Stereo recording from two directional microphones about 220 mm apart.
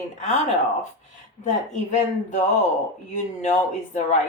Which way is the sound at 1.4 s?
35° left (ahead or behind).